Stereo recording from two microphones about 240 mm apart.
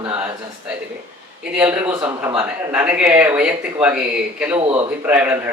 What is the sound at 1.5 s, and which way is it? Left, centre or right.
Speech, centre.